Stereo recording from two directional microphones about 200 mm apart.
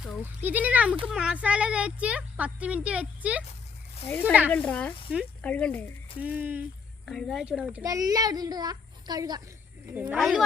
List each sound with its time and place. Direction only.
0.0 s a child's voice: 5° right (ahead or behind)
4.0 s speech: 10° left (ahead or behind)
4.3 s a child's voice: 10° right (ahead or behind)
4.5 s speech: 5° left (ahead or behind)
6.1 s a child's voice: 5° right (ahead or behind)
7.0 s a child's voice: centre (ahead or behind); by 9.4 s 20° right (ahead or behind)
9.9 s speech: 5° right (ahead or behind)